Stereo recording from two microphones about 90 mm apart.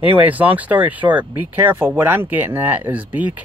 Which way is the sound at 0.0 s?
20° right (ahead or behind).